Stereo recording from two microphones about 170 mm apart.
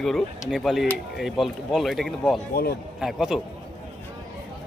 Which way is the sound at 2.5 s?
65° left (ahead or behind).